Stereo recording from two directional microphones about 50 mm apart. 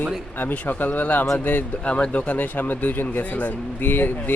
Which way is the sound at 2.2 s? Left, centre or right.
Left.